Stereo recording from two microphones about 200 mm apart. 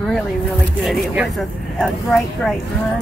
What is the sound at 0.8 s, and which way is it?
A woman's voice, centre (ahead or behind).